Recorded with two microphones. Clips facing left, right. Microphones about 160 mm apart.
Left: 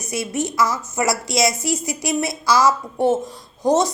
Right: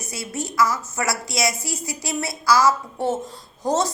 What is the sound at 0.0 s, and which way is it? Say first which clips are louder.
A woman's voice: left 6 dB; 20° left (ahead or behind).